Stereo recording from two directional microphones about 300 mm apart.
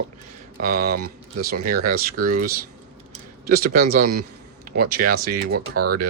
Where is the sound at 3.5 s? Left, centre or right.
Right.